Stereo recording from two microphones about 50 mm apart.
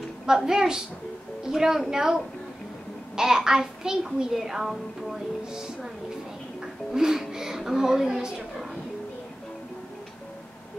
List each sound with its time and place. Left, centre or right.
0.3 s a child's voice: centre
6.6 s a woman's voice: centre